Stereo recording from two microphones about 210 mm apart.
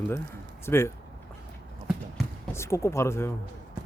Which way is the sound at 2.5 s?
15° left (ahead or behind).